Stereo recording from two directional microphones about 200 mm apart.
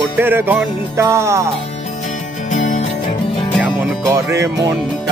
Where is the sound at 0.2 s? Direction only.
10° right (ahead or behind).